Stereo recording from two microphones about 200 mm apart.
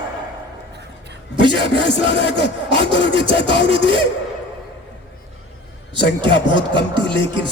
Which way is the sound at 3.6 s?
25° right (ahead or behind).